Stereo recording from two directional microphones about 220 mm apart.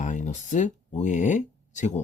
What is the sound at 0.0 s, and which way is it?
Speech, 35° left (ahead or behind).